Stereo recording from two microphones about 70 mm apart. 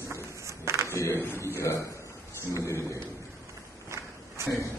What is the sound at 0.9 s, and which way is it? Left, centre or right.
Speech, left.